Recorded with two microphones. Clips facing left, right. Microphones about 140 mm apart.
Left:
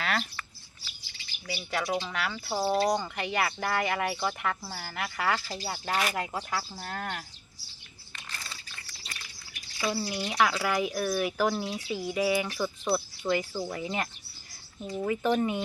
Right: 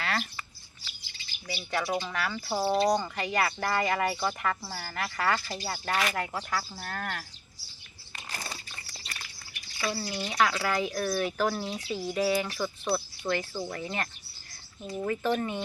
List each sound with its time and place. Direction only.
1.5 s speech: centre (ahead or behind)
8.3 s a sound: 40° right (ahead or behind)
9.8 s speech: 10° left (ahead or behind)
12.9 s speech: 15° left (ahead or behind)